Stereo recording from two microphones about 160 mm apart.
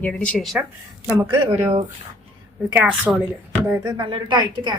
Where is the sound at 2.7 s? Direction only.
10° right (ahead or behind).